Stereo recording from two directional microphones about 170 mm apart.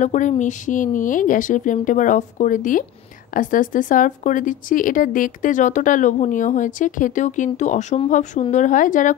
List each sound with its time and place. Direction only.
0.0 s speech: 45° left (ahead or behind)